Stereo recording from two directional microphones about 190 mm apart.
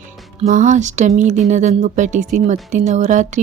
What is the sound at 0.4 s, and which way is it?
Speech, 40° right (ahead or behind).